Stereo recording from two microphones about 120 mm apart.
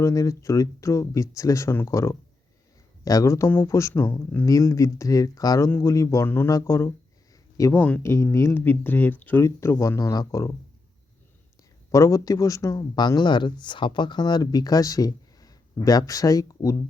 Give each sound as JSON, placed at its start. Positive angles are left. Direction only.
{"t": 0.0, "sound": "speech", "side_deg": 25}
{"t": 4.4, "sound": "speech", "side_deg": 30}
{"t": 7.7, "sound": "speech", "side_deg": 15}
{"t": 11.9, "sound": "a man's voice", "side_deg": 25}